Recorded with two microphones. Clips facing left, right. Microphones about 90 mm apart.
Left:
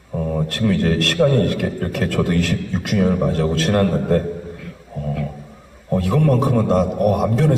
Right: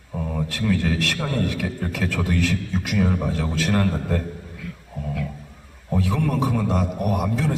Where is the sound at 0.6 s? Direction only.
35° left (ahead or behind).